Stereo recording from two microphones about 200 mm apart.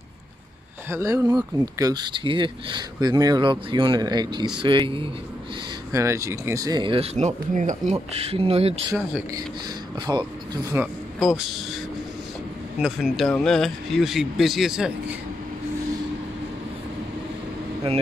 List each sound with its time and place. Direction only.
0.8 s speech: 15° right (ahead or behind)
5.9 s speech: 15° right (ahead or behind); by 8.7 s 30° right (ahead or behind)
10.0 s speech: 20° right (ahead or behind); by 11.6 s centre (ahead or behind)
12.8 s speech: centre (ahead or behind)